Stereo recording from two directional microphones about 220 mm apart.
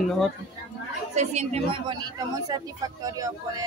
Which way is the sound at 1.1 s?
30° right (ahead or behind).